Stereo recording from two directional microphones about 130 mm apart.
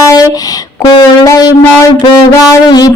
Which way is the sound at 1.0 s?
25° left (ahead or behind).